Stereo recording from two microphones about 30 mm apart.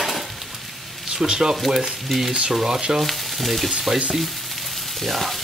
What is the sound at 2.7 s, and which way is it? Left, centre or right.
Frying, right.